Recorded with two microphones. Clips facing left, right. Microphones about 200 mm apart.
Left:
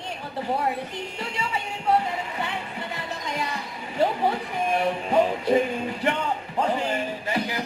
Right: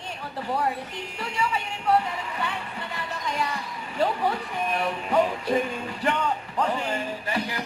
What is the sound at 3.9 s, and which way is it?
A man's voice, 20° left (ahead or behind).